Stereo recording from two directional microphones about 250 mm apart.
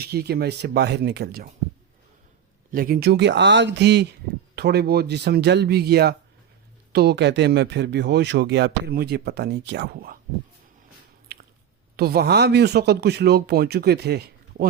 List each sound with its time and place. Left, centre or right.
0.0 s speech: right
2.7 s speech: right
11.3 s squish: right
11.9 s speech: right